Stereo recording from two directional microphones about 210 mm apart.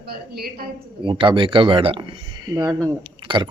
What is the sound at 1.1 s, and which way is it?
Speech, 25° right (ahead or behind).